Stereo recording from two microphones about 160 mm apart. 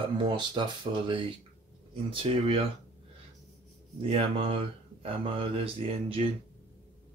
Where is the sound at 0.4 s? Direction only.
30° right (ahead or behind).